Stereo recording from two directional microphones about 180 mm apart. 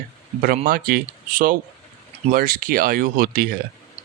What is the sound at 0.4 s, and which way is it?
Speech, 50° right (ahead or behind).